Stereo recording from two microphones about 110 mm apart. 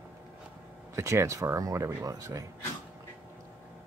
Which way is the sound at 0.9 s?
25° right (ahead or behind).